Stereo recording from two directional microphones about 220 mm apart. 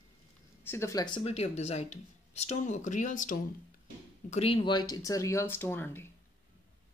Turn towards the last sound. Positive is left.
turn(degrees=10)  # may be behind; listen again after turning